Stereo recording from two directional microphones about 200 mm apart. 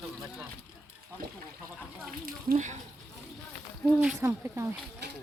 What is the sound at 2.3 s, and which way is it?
Speech, 40° right (ahead or behind).